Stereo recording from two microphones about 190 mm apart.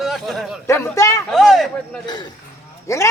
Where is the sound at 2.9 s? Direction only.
15° left (ahead or behind).